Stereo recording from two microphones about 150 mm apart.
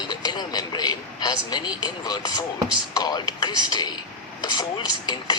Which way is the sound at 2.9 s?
25° left (ahead or behind).